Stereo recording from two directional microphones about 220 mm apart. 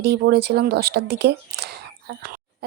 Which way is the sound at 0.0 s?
50° right (ahead or behind).